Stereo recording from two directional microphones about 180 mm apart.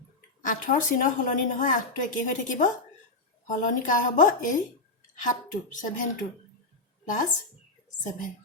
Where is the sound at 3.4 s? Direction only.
45° left (ahead or behind).